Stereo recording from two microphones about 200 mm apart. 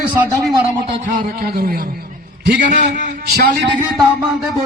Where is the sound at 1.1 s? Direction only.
50° right (ahead or behind).